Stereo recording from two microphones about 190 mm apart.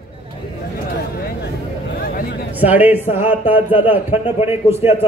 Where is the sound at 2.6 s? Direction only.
10° right (ahead or behind).